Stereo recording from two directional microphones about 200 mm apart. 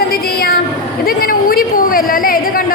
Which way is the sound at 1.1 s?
45° left (ahead or behind).